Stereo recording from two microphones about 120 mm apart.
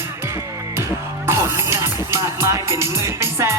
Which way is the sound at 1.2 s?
20° right (ahead or behind).